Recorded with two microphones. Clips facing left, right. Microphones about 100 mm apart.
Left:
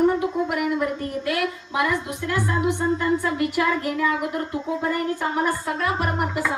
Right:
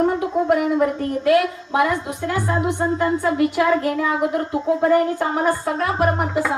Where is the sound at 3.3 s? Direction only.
30° right (ahead or behind).